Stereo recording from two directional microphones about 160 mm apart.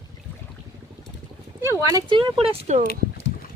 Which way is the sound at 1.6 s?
20° right (ahead or behind).